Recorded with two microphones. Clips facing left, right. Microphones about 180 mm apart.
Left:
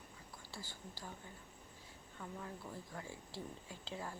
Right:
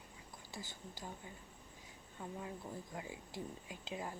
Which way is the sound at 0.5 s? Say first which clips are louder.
Right 2 dB; 20° right (ahead or behind).